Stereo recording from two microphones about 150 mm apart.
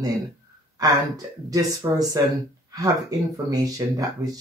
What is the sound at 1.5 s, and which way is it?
Speech, 25° right (ahead or behind).